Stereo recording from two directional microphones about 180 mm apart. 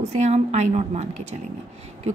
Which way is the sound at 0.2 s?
40° right (ahead or behind).